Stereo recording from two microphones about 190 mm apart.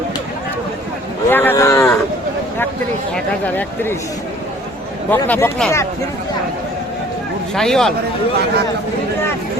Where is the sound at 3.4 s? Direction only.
10° left (ahead or behind).